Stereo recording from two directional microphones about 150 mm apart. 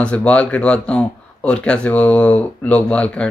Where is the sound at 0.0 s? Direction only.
10° left (ahead or behind).